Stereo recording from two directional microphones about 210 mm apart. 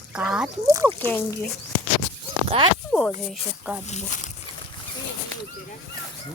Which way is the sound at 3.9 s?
35° left (ahead or behind).